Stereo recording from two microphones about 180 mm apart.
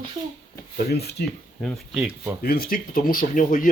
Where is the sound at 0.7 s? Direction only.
60° left (ahead or behind).